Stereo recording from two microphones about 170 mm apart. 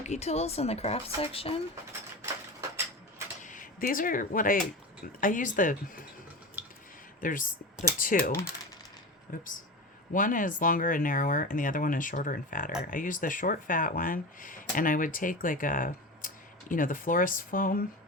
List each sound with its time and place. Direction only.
0.0 s speech: 40° left (ahead or behind)
2.2 s mechanisms: 15° right (ahead or behind)
3.4 s speech: 50° left (ahead or behind)
7.2 s speech: 55° left (ahead or behind)
10.1 s speech: 50° left (ahead or behind)